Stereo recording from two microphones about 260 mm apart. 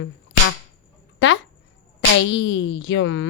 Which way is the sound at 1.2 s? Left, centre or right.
Left.